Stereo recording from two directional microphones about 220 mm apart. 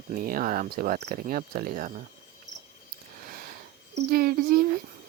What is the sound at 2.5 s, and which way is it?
Cricket, 55° right (ahead or behind).